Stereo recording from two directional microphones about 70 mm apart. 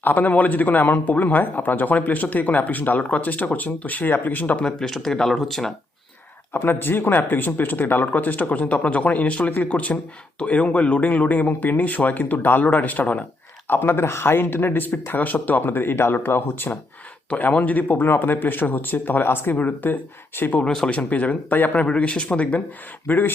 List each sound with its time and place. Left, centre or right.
0.0 s speech: left
4.6 s speech: centre
6.5 s speech: left
17.2 s speech: centre
20.7 s speech: centre
20.9 s speech: left